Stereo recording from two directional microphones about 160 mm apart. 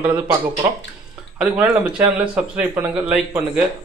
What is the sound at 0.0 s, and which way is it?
Speech, 15° right (ahead or behind).